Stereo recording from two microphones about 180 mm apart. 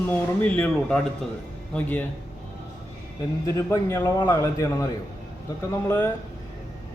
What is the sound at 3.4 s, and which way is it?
Speech, 15° left (ahead or behind).